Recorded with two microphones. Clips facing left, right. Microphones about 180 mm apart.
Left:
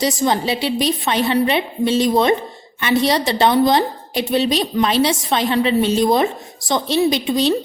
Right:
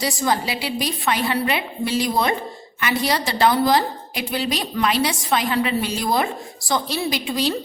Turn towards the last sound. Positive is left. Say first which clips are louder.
# left 6 dB
turn(degrees=20)  # may be behind; listen again after turning